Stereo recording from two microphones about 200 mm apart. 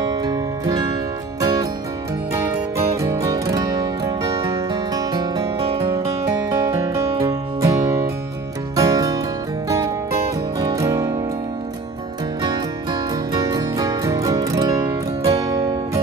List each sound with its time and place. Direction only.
0.0 s music: 20° right (ahead or behind)
3.0 s music: 15° right (ahead or behind)
12.4 s music: 20° right (ahead or behind)